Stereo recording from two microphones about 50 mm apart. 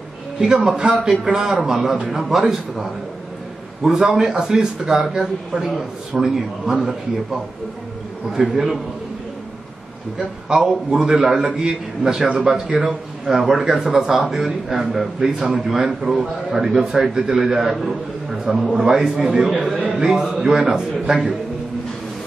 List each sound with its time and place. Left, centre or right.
0.4 s a man's voice: centre
8.3 s a man's voice: centre
10.1 s a man's voice: centre
13.4 s a man's voice: centre
19.8 s a man's voice: right
20.1 s a man's voice: centre